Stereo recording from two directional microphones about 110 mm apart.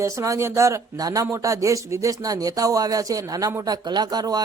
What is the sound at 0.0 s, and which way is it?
Speech, 25° right (ahead or behind).